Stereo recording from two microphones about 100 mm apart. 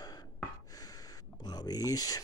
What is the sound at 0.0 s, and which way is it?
Gasp, 40° left (ahead or behind).